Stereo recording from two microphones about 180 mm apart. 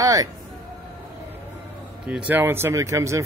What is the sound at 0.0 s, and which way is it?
Speech, 20° right (ahead or behind).